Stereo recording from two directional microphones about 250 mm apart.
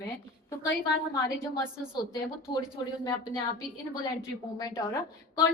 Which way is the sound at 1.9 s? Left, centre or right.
Centre.